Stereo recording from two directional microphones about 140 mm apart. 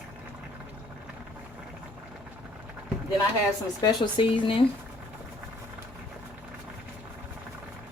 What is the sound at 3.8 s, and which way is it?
Speech, 30° left (ahead or behind).